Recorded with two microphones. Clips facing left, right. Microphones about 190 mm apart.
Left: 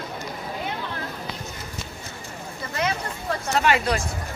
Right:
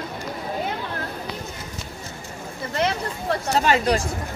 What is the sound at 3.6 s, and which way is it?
Speech, 35° right (ahead or behind).